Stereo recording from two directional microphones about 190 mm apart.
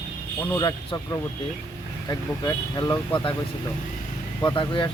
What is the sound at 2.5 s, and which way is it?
Speech, 15° left (ahead or behind).